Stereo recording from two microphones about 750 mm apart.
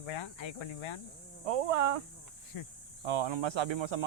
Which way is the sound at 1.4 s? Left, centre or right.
Right.